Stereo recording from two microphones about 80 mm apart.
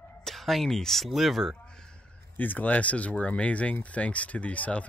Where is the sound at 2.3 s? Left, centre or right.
Left.